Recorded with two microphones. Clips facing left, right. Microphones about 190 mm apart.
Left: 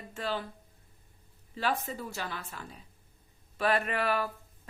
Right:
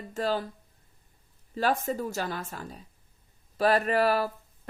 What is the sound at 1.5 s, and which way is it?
Speech, 45° right (ahead or behind).